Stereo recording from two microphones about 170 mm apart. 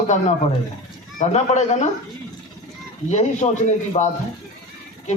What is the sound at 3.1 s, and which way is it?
A man's voice, 45° left (ahead or behind).